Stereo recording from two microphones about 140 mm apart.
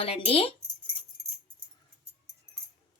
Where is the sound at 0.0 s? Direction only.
45° left (ahead or behind).